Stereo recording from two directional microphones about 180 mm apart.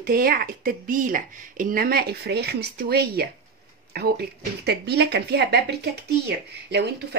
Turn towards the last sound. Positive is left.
turn(degrees=-65)  # may be behind; listen again after turning